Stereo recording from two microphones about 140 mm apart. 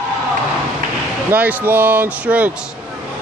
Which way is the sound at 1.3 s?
15° right (ahead or behind).